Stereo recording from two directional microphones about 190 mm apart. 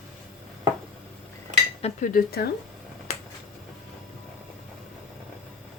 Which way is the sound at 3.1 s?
35° left (ahead or behind).